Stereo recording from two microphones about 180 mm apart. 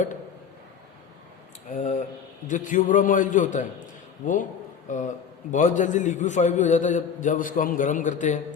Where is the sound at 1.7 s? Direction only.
45° left (ahead or behind).